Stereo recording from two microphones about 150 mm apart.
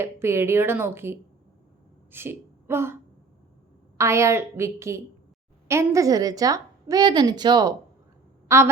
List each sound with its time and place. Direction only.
0.0 s a woman's voice: 15° right (ahead or behind)
8.4 s a woman's voice: 15° right (ahead or behind)